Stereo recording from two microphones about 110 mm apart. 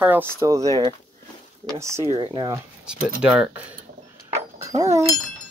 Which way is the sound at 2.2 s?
40° right (ahead or behind).